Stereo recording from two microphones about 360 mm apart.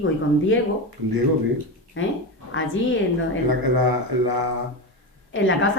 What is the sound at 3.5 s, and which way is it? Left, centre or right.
Speech, right.